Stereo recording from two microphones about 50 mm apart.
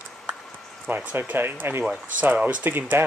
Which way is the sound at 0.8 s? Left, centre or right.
Right.